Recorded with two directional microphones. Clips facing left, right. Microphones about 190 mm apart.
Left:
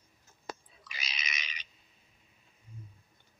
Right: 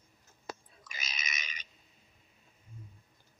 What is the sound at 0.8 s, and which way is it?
Pig, 45° right (ahead or behind).